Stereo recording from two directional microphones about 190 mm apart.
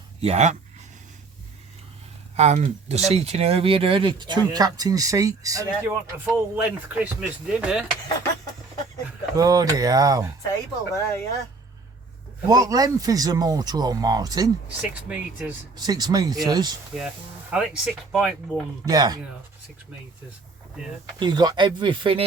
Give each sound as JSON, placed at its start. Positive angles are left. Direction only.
{"t": 0.2, "sound": "speech", "side_deg": -35}
{"t": 2.3, "sound": "speech", "side_deg": -35}
{"t": 9.3, "sound": "speech", "side_deg": -20}
{"t": 10.5, "sound": "speech", "side_deg": 15}
{"t": 12.5, "sound": "speech", "side_deg": -20}
{"t": 14.8, "sound": "speech", "side_deg": -10}
{"t": 15.8, "sound": "speech", "side_deg": -20}
{"t": 17.5, "sound": "speech", "side_deg": -5}
{"t": 18.9, "sound": "speech", "side_deg": -20}
{"t": 21.2, "sound": "speech", "side_deg": -25}